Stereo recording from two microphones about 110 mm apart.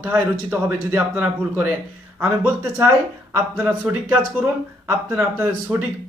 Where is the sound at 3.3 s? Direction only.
15° right (ahead or behind).